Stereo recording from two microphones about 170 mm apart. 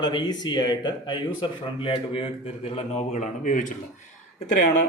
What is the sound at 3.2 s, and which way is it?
Speech, 45° left (ahead or behind).